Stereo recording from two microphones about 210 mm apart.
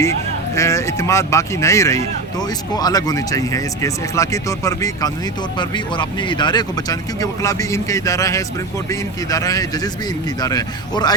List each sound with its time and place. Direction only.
0.5 s a man's voice: 15° left (ahead or behind)